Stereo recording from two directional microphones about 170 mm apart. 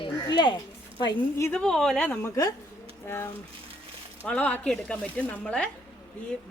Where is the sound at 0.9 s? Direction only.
25° left (ahead or behind).